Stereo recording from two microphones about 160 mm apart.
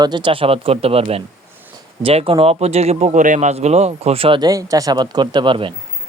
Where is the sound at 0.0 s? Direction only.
30° right (ahead or behind).